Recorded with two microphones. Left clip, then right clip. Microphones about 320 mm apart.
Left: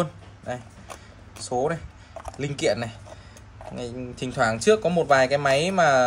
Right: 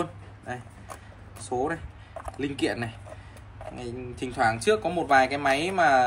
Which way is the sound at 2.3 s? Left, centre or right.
Left.